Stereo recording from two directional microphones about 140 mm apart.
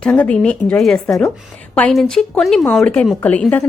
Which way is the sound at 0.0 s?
10° left (ahead or behind).